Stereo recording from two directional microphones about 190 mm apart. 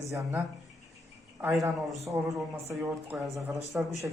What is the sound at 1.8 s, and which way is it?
A man's voice, centre (ahead or behind).